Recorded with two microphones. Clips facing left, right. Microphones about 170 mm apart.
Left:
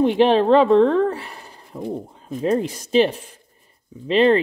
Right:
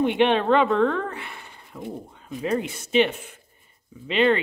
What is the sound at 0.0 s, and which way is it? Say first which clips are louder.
Speech: left 5 dB; 35° left (ahead or behind).